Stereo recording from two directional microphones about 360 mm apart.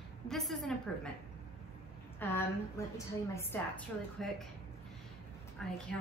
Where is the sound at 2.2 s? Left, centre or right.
Centre.